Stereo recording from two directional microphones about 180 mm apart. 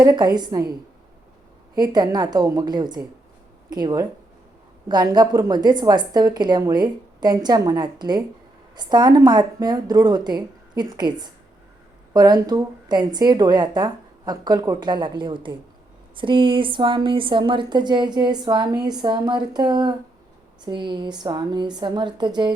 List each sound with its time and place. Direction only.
0.0 s a woman's voice: 20° right (ahead or behind)
1.7 s a woman's voice: 25° right (ahead or behind)